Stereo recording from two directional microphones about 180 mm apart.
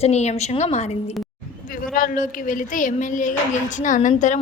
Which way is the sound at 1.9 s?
50° left (ahead or behind).